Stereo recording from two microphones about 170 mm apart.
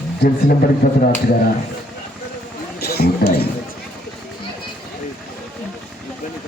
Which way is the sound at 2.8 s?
70° left (ahead or behind).